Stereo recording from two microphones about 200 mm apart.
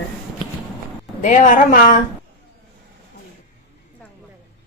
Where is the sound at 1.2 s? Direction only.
40° left (ahead or behind).